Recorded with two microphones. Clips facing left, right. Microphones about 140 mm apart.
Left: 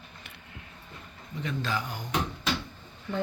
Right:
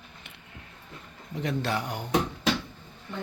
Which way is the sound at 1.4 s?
75° right (ahead or behind).